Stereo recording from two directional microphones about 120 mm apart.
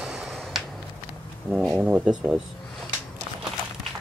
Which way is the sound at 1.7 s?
10° right (ahead or behind).